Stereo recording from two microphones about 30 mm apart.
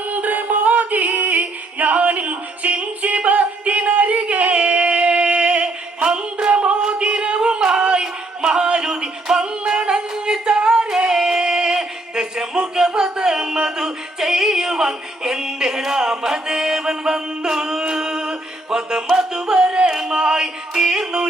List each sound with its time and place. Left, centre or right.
0.1 s music: right
3.7 s a sound: right
4.5 s music: right
7.8 s a sound: right
8.0 s music: right
9.6 s yodeling: right
10.5 s music: right
19.1 s a sound: centre
19.9 s music: right